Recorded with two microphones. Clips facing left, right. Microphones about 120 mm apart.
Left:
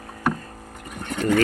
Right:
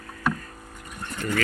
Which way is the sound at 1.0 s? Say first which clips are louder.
Left 8 dB; 75° left (ahead or behind).